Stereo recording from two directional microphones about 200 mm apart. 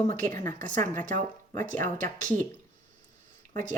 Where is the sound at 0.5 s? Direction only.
40° right (ahead or behind).